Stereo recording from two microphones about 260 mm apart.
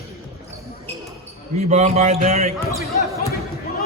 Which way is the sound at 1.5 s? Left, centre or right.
Right.